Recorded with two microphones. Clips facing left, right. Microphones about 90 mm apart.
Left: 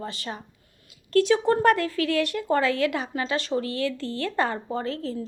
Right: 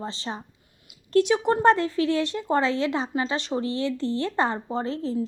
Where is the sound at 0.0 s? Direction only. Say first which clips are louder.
Right 1 dB; 25° right (ahead or behind).